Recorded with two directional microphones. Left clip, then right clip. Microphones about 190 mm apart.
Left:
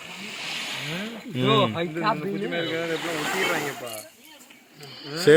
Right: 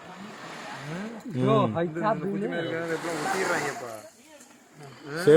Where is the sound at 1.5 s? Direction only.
50° right (ahead or behind).